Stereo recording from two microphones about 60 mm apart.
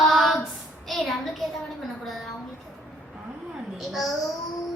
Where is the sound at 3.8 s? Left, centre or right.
Centre.